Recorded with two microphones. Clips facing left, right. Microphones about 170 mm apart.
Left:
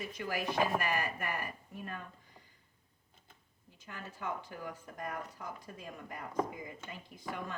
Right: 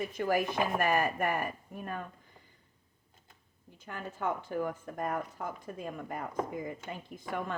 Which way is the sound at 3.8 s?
55° right (ahead or behind).